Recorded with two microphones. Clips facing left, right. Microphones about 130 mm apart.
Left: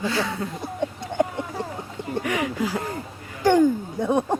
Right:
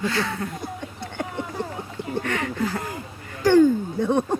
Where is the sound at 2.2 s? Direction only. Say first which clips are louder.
Left 2 dB; 10° left (ahead or behind).